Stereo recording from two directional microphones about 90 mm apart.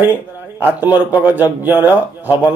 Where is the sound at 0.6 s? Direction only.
20° right (ahead or behind).